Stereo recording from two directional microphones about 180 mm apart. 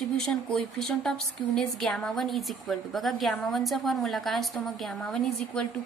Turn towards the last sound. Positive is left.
turn(degrees=5)  # may be behind; listen again after turning